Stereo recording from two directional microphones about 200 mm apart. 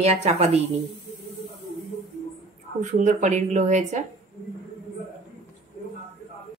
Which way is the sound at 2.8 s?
40° right (ahead or behind).